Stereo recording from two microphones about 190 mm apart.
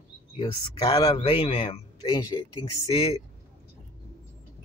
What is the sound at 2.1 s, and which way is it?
Speech, 20° left (ahead or behind).